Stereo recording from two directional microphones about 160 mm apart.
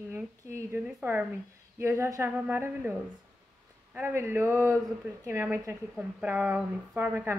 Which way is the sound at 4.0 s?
15° right (ahead or behind).